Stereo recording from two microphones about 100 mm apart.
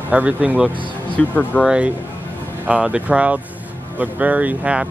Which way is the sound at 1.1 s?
15° left (ahead or behind).